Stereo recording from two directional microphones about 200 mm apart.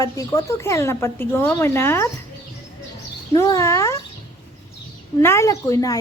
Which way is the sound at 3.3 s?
15° left (ahead or behind).